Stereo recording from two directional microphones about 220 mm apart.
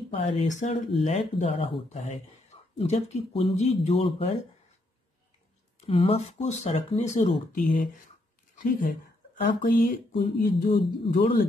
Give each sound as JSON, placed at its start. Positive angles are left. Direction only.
{"t": 0.2, "sound": "speech", "side_deg": 35}
{"t": 5.8, "sound": "speech", "side_deg": 25}